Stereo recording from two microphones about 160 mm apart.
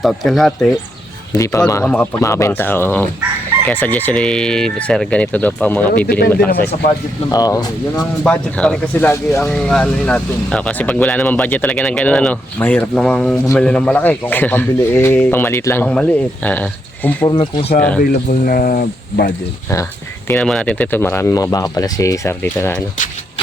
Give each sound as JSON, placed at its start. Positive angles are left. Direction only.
{"t": 0.0, "sound": "speech", "side_deg": 0}
{"t": 1.3, "sound": "speech", "side_deg": 20}
{"t": 6.1, "sound": "speech", "side_deg": 75}
{"t": 7.3, "sound": "speech", "side_deg": 25}
{"t": 8.2, "sound": "speech", "side_deg": 5}
{"t": 9.5, "sound": "speech", "side_deg": 5}
{"t": 17.2, "sound": "speech", "side_deg": 30}
{"t": 18.3, "sound": "speech", "side_deg": 60}
{"t": 20.2, "sound": "speech", "side_deg": 5}